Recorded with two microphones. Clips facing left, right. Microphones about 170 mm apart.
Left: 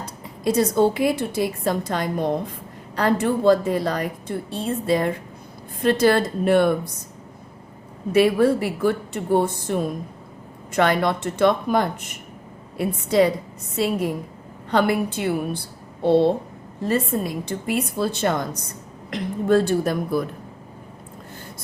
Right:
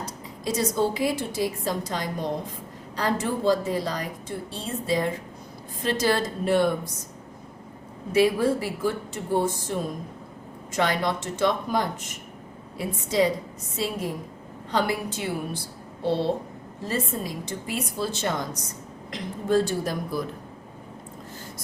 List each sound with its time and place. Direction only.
0.0 s a woman's voice: 55° left (ahead or behind)
8.1 s a woman's voice: 60° left (ahead or behind)